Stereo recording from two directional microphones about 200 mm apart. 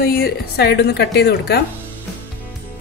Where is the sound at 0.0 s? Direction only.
50° left (ahead or behind).